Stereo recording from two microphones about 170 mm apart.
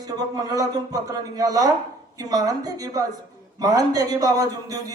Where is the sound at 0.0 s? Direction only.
20° right (ahead or behind).